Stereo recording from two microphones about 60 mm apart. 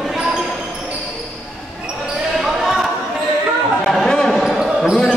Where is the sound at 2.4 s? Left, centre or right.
Centre.